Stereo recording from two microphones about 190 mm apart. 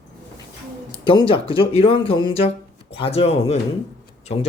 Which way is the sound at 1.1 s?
25° left (ahead or behind).